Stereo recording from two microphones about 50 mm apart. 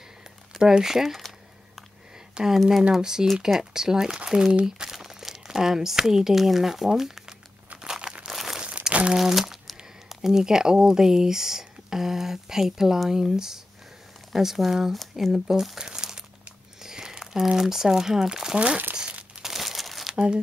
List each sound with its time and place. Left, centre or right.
0.5 s speech: centre
2.3 s speech: centre
7.7 s crumpling: centre
8.3 s crumpling: centre
9.8 s speech: centre
15.8 s crumpling: centre
16.8 s a sound: centre
17.6 s speech: centre
18.9 s crumpling: right
19.4 s crumpling: centre